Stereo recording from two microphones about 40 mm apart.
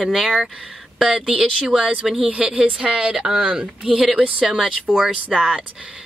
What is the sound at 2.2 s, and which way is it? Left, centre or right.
Speech, right.